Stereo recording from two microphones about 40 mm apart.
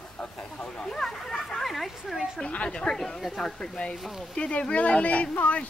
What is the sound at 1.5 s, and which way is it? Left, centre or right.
Speech, centre.